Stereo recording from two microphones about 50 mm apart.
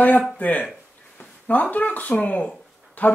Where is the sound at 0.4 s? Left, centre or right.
Left.